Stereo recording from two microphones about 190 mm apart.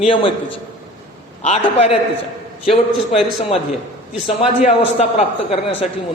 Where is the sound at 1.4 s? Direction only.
30° left (ahead or behind).